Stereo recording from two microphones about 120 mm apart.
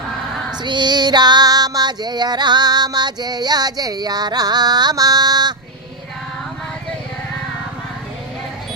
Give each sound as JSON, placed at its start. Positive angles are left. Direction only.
{"t": 0.6, "sound": "female singing", "side_deg": -40}